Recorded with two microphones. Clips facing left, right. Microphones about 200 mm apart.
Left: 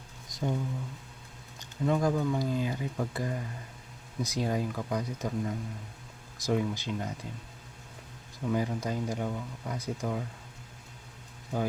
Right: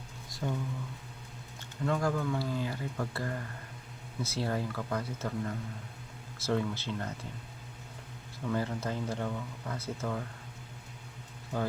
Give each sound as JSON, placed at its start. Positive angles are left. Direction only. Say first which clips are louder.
{"t": 0.3, "sound": "a sound", "louder": "left 3 dB", "side_deg": 20}
{"t": 1.8, "sound": "speech", "louder": "left 3 dB", "side_deg": 15}
{"t": 8.4, "sound": "speech", "louder": "left 3 dB", "side_deg": 15}